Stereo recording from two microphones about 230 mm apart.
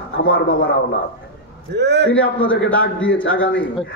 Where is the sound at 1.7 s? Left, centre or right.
Right.